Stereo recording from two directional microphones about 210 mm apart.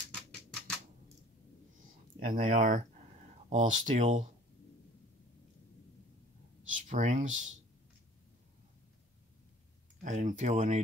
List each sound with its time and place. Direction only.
0.1 s typewriter: 5° left (ahead or behind)
2.2 s speech: 40° right (ahead or behind)
6.9 s speech: 35° right (ahead or behind)
10.0 s speech: 35° right (ahead or behind)